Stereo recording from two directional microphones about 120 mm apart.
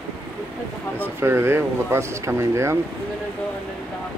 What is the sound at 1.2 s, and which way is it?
Speech, 20° right (ahead or behind).